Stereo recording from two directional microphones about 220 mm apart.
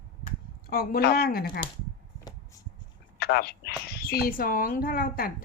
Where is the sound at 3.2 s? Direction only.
45° left (ahead or behind).